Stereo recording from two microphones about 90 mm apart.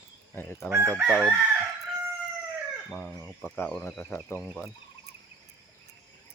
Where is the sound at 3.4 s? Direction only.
25° left (ahead or behind).